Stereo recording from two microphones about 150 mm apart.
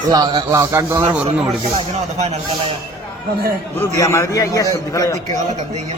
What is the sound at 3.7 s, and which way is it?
A man's voice, 20° left (ahead or behind).